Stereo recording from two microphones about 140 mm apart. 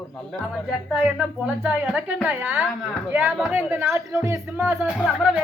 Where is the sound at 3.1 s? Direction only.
15° right (ahead or behind).